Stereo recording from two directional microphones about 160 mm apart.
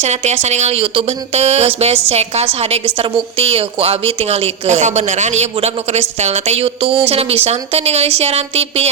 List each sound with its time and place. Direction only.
0.0 s speech: 45° right (ahead or behind)